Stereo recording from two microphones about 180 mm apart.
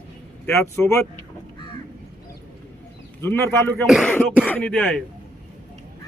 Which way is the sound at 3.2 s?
10° left (ahead or behind).